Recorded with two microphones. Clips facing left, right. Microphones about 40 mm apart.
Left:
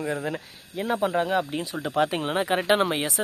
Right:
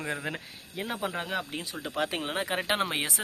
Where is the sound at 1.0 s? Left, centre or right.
Centre.